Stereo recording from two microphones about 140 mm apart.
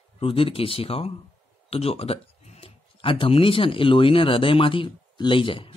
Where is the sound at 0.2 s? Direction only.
40° left (ahead or behind).